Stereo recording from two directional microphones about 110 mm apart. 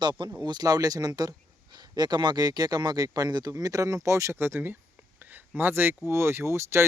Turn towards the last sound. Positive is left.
turn(degrees=-25)  # may be behind; listen again after turning